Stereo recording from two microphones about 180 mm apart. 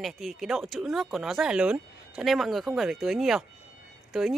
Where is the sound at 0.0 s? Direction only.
Centre (ahead or behind).